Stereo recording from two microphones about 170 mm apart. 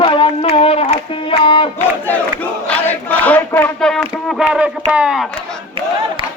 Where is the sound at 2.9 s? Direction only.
10° left (ahead or behind).